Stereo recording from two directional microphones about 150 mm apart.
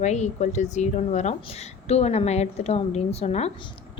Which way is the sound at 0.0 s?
50° left (ahead or behind).